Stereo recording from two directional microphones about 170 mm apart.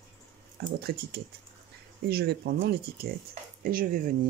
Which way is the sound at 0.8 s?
65° right (ahead or behind).